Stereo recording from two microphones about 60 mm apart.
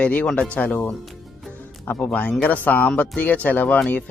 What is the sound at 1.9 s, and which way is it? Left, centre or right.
Speech, left.